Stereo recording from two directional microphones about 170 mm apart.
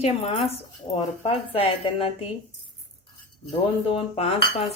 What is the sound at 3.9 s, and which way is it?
Speech, 35° left (ahead or behind).